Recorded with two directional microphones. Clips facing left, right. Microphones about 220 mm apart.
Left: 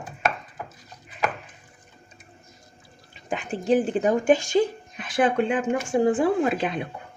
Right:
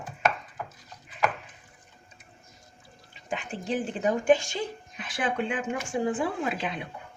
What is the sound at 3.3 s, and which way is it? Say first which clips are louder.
Speech: left 8 dB; 45° left (ahead or behind).